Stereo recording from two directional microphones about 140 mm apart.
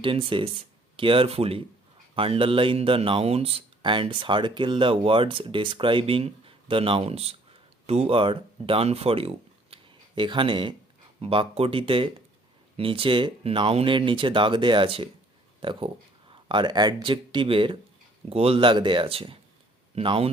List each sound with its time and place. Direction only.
0.0 s speech: 40° right (ahead or behind)